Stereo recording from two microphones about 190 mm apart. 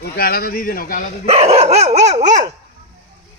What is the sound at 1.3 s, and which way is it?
Dog, 35° right (ahead or behind).